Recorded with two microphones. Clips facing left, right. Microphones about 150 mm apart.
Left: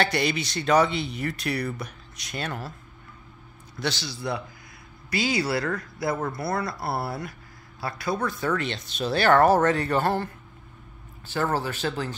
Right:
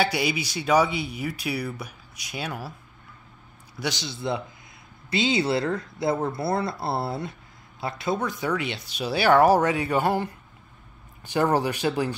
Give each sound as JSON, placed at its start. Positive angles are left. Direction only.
{"t": 0.0, "sound": "speech", "side_deg": -10}
{"t": 3.7, "sound": "speech", "side_deg": -15}